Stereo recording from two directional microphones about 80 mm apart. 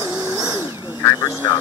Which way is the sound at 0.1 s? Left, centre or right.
Right.